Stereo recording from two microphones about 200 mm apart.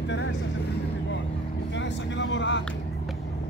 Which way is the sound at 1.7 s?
65° left (ahead or behind).